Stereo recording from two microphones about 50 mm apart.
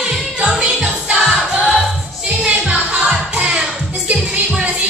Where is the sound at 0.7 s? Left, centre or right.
Centre.